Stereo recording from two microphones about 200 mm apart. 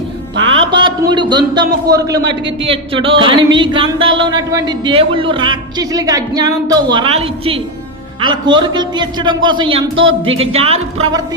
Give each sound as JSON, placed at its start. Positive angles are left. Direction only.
{"t": 0.3, "sound": "music", "side_deg": -70}
{"t": 0.6, "sound": "a sound", "side_deg": -25}
{"t": 1.1, "sound": "speech", "side_deg": -20}